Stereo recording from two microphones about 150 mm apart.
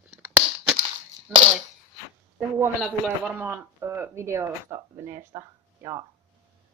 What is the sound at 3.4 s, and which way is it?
Speech, 15° right (ahead or behind).